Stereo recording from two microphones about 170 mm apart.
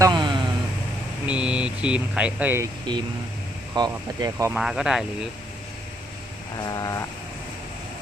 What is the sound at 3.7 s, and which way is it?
Speech, 20° right (ahead or behind).